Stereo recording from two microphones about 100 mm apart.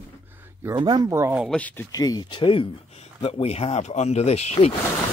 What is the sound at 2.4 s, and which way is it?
Speech, 60° left (ahead or behind).